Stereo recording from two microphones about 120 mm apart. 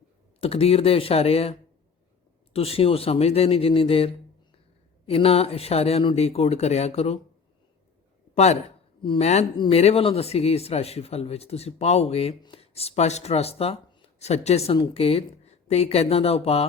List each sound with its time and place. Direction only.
0.3 s speech: 55° left (ahead or behind)
9.0 s speech: 45° left (ahead or behind)
9.2 s speech: 70° left (ahead or behind)
9.6 s speech: 55° left (ahead or behind)